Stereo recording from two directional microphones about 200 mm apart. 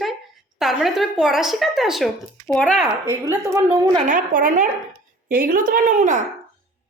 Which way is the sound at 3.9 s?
40° right (ahead or behind).